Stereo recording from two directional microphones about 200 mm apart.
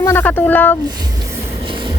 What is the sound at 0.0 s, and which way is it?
Speech, 10° left (ahead or behind).